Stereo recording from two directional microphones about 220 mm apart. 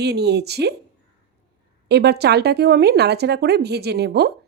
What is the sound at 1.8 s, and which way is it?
A woman's voice, 50° right (ahead or behind).